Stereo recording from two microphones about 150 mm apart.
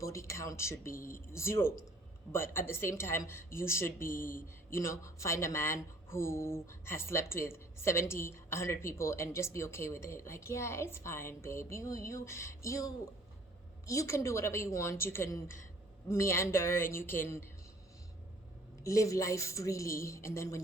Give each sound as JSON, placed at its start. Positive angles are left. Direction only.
{"t": 0.0, "sound": "speech", "side_deg": 20}
{"t": 18.8, "sound": "speech", "side_deg": 20}